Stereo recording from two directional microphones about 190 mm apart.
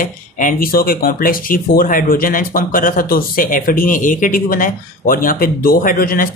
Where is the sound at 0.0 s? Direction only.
45° left (ahead or behind).